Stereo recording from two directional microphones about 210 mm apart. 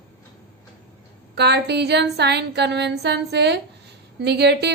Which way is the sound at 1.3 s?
50° right (ahead or behind).